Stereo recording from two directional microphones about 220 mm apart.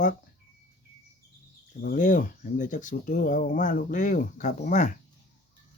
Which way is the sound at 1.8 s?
40° left (ahead or behind).